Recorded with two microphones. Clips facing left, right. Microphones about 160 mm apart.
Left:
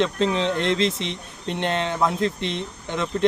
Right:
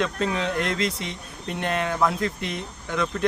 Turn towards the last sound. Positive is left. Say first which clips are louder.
# left 1 dB
turn(degrees=25)  # may be behind; listen again after turning